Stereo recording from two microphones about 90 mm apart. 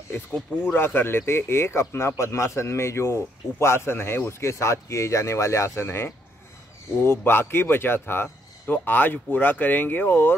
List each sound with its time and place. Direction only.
0.7 s a man's voice: 25° left (ahead or behind)